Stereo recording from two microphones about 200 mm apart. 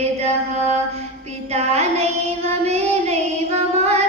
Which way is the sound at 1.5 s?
30° right (ahead or behind).